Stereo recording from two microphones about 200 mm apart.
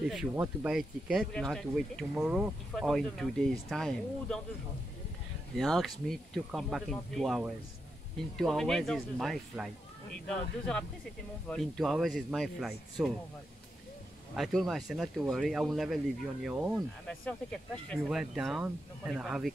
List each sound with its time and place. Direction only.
0.0 s speech: 5° right (ahead or behind)
5.6 s speech: centre (ahead or behind)
14.3 s speech: centre (ahead or behind)